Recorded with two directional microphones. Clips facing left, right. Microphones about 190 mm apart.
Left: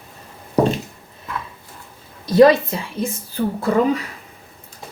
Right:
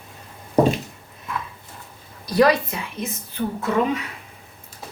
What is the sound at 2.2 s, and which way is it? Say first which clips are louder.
A woman's voice: left 6 dB; 25° left (ahead or behind).